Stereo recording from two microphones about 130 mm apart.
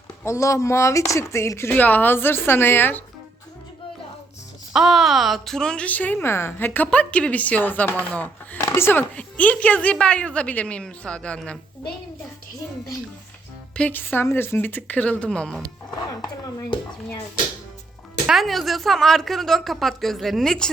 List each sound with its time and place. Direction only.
0.3 s speech: 25° left (ahead or behind)
4.7 s a woman's voice: 5° right (ahead or behind)
13.7 s a woman's voice: 10° left (ahead or behind)
16.2 s speech: 40° left (ahead or behind)
18.3 s a woman's voice: centre (ahead or behind)